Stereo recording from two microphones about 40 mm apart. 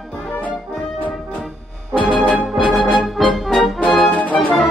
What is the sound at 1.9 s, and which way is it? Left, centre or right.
Music, left.